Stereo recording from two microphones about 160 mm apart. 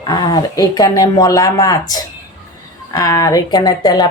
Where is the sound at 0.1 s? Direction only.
25° left (ahead or behind).